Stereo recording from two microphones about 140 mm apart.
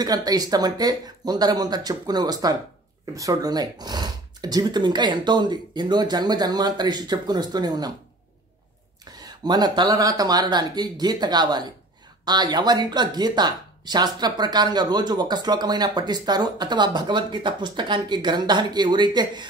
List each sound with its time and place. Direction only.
0.0 s speech: 25° right (ahead or behind)
9.2 s speech: 30° right (ahead or behind)